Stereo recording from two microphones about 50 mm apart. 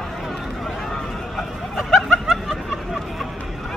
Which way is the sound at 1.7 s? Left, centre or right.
Centre.